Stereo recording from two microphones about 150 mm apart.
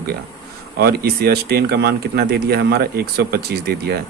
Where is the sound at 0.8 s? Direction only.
90° right.